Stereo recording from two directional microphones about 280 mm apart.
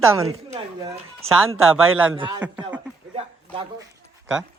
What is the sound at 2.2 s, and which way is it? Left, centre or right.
Speech, centre.